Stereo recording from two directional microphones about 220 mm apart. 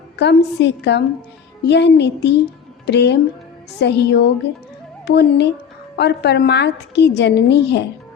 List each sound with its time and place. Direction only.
0.2 s a woman's voice: 50° left (ahead or behind)